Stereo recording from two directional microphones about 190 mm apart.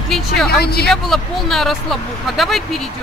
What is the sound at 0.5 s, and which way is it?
Speech, 55° left (ahead or behind).